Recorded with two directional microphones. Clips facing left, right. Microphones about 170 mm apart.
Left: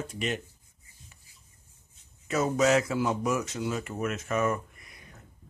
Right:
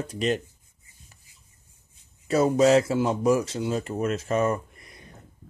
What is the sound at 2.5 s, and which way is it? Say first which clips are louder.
Speech: right 4 dB; 30° right (ahead or behind).